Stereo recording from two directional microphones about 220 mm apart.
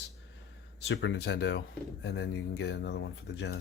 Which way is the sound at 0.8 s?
55° left (ahead or behind).